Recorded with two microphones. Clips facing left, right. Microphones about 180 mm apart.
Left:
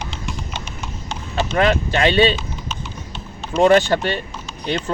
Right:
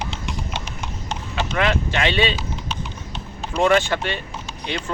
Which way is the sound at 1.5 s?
40° left (ahead or behind).